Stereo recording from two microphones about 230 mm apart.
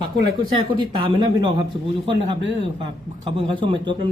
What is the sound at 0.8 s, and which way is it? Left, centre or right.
A man's voice, right.